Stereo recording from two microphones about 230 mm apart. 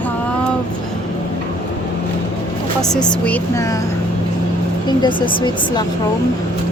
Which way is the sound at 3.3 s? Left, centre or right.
Centre.